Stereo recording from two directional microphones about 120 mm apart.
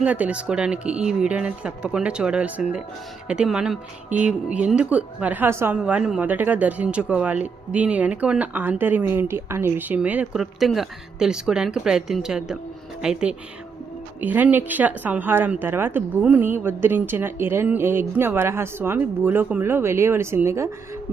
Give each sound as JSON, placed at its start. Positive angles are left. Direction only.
{"t": 0.0, "sound": "speech", "side_deg": -10}
{"t": 5.7, "sound": "a woman's voice", "side_deg": -10}